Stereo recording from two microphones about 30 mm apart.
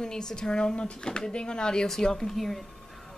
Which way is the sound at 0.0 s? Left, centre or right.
Left.